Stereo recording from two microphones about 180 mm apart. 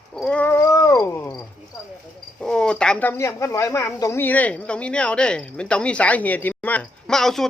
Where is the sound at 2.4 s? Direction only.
5° left (ahead or behind).